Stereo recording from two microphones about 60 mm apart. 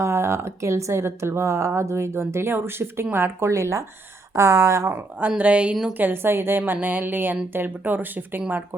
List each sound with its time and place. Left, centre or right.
0.0 s speech: right
3.4 s speech: right
5.4 s speech: right
5.9 s a woman's voice: right